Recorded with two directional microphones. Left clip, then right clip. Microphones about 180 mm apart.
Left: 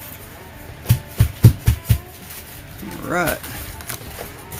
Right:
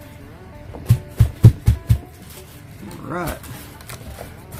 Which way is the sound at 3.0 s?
20° left (ahead or behind).